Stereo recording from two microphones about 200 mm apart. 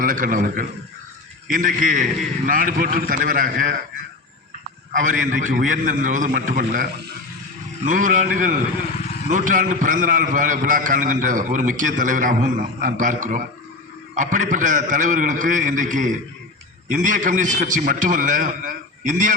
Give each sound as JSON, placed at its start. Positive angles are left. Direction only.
{"t": 0.0, "sound": "a man's voice", "side_deg": -40}
{"t": 4.9, "sound": "a man's voice", "side_deg": -40}
{"t": 7.9, "sound": "a man's voice", "side_deg": -40}